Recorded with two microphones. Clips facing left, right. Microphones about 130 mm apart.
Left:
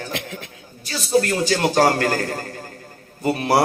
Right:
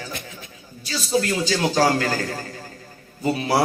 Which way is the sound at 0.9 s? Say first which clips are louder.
Left 3 dB; 55° left (ahead or behind).